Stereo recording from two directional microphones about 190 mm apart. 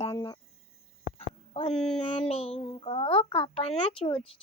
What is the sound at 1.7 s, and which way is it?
Speech, 5° left (ahead or behind).